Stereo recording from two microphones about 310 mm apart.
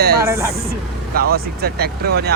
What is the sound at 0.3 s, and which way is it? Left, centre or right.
Speech, centre.